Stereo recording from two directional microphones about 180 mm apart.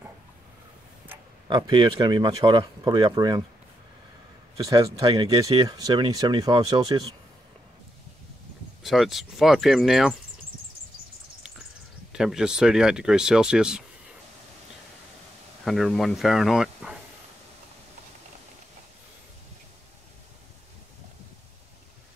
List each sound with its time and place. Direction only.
1.5 s speech: 25° right (ahead or behind)
4.6 s speech: 20° right (ahead or behind)
8.8 s speech: centre (ahead or behind)
12.1 s speech: 5° right (ahead or behind)
15.6 s speech: centre (ahead or behind)